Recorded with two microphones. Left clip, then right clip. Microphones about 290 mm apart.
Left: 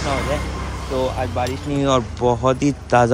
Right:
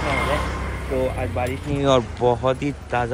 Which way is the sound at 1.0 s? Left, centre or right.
Centre.